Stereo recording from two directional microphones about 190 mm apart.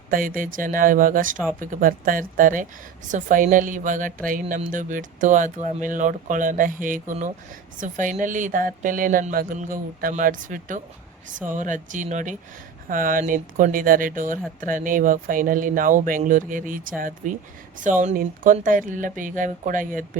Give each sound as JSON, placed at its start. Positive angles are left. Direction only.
{"t": 0.1, "sound": "speech", "side_deg": -45}